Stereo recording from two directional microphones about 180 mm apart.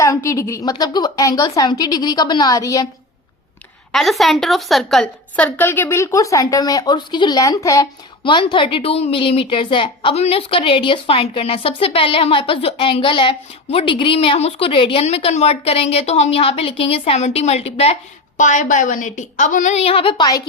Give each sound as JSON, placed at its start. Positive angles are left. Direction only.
{"t": 0.3, "sound": "a woman's voice", "side_deg": 15}
{"t": 3.9, "sound": "a woman's voice", "side_deg": 0}